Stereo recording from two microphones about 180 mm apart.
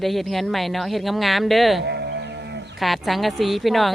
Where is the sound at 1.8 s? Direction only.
70° right (ahead or behind).